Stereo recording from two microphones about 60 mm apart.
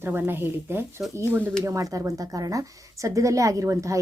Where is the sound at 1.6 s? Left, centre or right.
Right.